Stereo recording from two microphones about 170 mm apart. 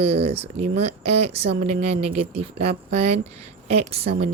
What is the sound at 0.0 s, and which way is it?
A woman's voice, 40° right (ahead or behind).